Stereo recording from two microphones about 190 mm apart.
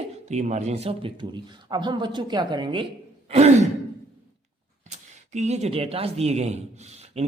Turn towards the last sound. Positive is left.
turn(degrees=-35)  # may be behind; listen again after turning